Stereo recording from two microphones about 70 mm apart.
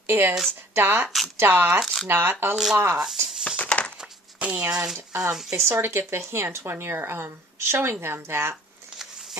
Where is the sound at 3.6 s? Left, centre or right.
Left.